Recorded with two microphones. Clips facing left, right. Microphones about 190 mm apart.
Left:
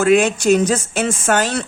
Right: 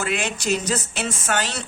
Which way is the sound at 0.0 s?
50° left (ahead or behind).